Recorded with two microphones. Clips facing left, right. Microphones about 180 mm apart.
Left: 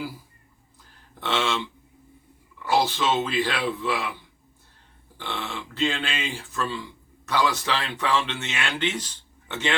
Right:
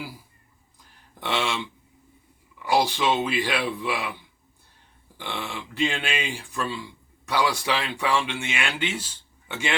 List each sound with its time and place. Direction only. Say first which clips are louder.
1.2 s speech: left 1 dB; 15° right (ahead or behind)
2.6 s speech: right 1 dB; 15° right (ahead or behind)
5.1 s speech: even; 15° right (ahead or behind)